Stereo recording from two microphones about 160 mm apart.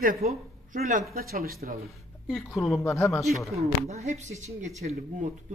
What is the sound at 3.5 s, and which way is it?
Speech, 45° right (ahead or behind).